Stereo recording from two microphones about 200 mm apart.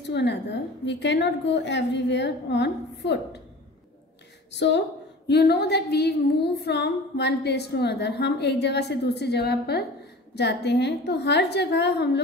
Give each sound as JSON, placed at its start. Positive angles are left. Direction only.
{"t": 0.0, "sound": "a woman's voice", "side_deg": 60}
{"t": 4.5, "sound": "a woman's voice", "side_deg": 60}